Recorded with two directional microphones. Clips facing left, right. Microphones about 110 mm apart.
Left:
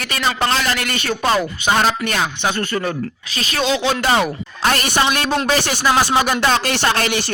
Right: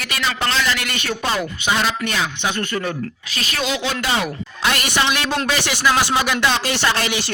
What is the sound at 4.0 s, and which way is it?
A man's voice, 40° left (ahead or behind).